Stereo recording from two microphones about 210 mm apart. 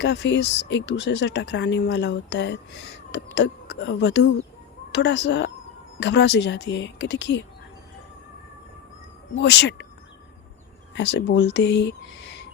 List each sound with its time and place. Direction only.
0.0 s speech: 60° left (ahead or behind)
9.4 s speech: 55° left (ahead or behind)
10.9 s speech: 55° left (ahead or behind)